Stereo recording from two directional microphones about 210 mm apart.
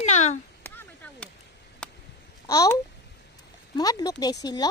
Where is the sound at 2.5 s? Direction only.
15° left (ahead or behind).